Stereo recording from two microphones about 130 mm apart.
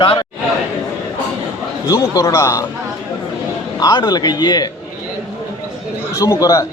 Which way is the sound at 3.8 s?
30° left (ahead or behind).